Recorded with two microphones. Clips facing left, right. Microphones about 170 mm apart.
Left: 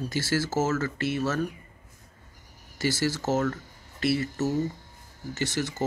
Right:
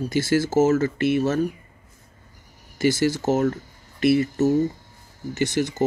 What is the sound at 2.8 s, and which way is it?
Speech, 20° right (ahead or behind).